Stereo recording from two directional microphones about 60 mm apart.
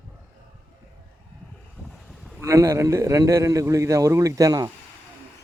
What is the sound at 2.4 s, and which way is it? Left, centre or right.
A man's voice, right.